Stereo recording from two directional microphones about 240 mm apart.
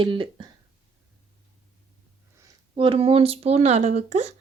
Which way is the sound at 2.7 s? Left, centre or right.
Right.